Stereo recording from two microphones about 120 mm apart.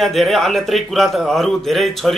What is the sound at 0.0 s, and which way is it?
A man's voice, centre (ahead or behind).